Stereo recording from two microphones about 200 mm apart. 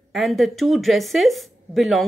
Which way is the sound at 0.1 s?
Centre (ahead or behind).